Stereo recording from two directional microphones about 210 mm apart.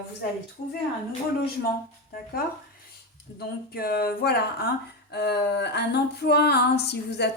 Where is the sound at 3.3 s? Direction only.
50° left (ahead or behind).